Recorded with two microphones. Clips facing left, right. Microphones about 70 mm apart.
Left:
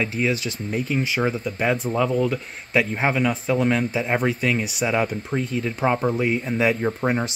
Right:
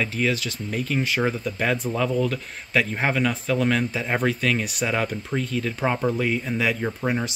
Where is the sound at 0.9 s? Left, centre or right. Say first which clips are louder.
Even; centre.